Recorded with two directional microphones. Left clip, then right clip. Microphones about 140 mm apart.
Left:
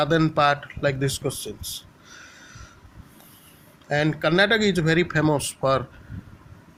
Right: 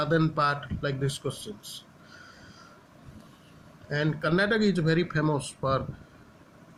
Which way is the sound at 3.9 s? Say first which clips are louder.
Left 6 dB; 40° left (ahead or behind).